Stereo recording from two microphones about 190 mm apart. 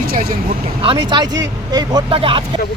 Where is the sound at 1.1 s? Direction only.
20° right (ahead or behind).